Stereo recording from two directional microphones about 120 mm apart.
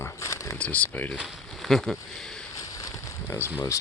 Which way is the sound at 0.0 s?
25° left (ahead or behind).